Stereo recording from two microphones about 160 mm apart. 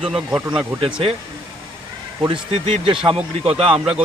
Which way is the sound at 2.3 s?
35° right (ahead or behind).